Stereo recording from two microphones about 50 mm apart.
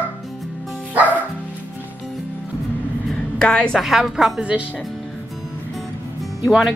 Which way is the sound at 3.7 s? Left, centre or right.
Centre.